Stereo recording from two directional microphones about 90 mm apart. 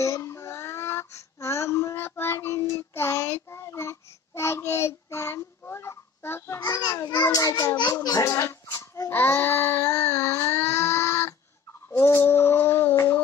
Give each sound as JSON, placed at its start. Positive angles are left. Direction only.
{"t": 0.0, "sound": "female singing", "side_deg": 35}
{"t": 3.4, "sound": "child singing", "side_deg": 30}
{"t": 6.8, "sound": "babbling", "side_deg": 50}
{"t": 7.9, "sound": "child singing", "side_deg": 40}
{"t": 8.3, "sound": "a sound", "side_deg": 30}